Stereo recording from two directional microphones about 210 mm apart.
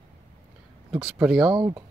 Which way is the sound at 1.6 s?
20° right (ahead or behind).